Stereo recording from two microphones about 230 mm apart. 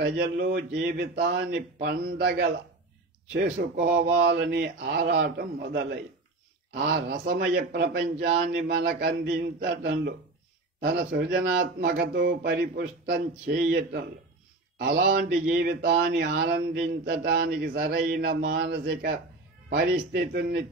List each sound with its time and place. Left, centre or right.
0.0 s a man's voice: right